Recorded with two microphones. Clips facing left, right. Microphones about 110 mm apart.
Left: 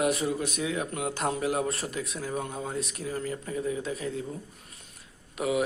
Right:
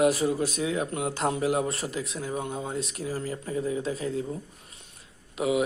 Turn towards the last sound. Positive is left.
turn(degrees=-25)  # may be behind; listen again after turning